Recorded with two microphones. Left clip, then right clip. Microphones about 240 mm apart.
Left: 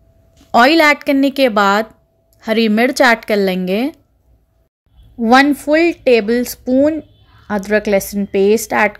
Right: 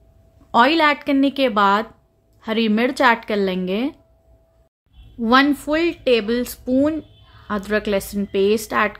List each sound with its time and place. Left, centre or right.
0.5 s speech: centre
5.2 s speech: centre